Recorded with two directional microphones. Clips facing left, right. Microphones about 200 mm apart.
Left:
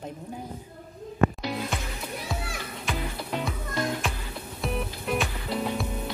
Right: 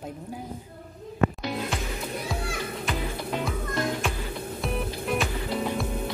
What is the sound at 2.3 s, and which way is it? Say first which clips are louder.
Music: right 3 dB; centre (ahead or behind).